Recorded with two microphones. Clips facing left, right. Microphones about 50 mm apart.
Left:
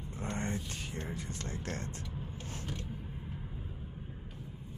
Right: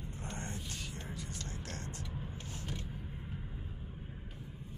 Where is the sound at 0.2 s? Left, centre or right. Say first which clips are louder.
Left 8 dB; left.